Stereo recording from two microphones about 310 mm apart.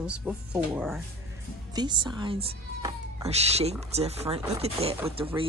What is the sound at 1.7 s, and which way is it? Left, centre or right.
Speech, centre.